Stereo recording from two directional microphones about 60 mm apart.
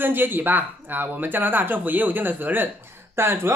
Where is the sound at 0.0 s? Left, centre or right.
Right.